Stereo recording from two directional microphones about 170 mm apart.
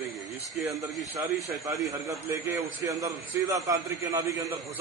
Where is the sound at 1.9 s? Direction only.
20° right (ahead or behind).